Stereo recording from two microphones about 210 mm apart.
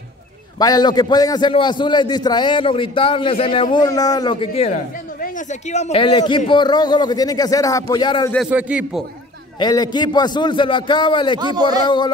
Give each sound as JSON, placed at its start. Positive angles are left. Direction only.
{"t": 0.6, "sound": "speech", "side_deg": 20}
{"t": 8.5, "sound": "speech", "side_deg": -5}
{"t": 9.6, "sound": "speech", "side_deg": 20}
{"t": 11.3, "sound": "a man's voice", "side_deg": -20}